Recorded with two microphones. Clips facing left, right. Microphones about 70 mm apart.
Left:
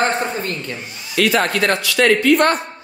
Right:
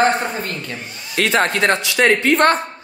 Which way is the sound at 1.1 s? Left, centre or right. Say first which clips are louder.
Even; right.